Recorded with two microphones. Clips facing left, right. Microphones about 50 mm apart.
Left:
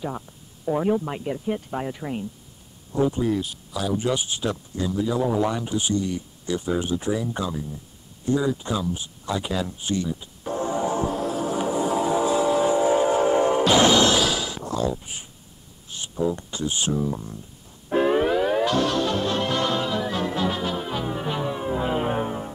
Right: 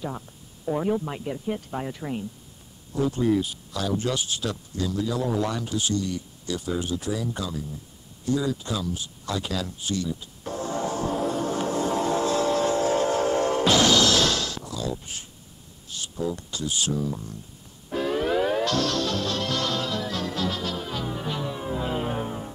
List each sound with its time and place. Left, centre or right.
0.7 s speech: centre
3.2 s speech: centre; by 10.3 s left
10.7 s vehicle: centre
11.1 s vehicle: centre; by 14.2 s left
14.2 s a sound: centre
14.6 s a sound: left
14.9 s speech: centre
17.8 s music: left
18.3 s music: centre
18.6 s music: centre